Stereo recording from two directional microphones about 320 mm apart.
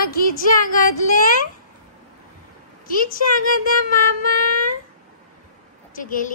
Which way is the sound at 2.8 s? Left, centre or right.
Left.